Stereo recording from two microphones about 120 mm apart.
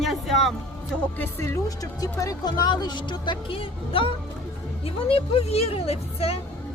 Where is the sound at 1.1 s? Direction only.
20° left (ahead or behind).